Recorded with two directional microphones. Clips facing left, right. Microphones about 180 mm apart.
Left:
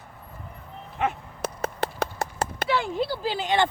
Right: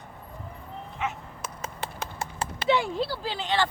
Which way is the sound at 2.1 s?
40° left (ahead or behind).